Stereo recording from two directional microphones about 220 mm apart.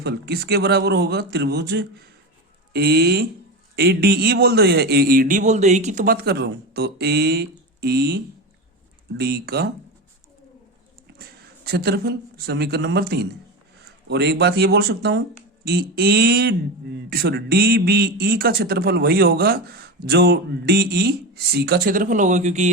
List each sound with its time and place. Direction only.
0.0 s speech: 50° right (ahead or behind)
11.2 s speech: 45° right (ahead or behind)